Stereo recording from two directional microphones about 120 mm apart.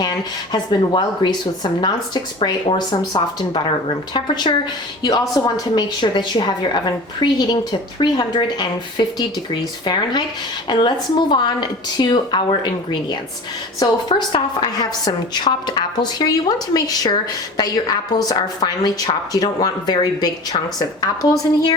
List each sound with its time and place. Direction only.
0.0 s a woman's voice: 35° left (ahead or behind)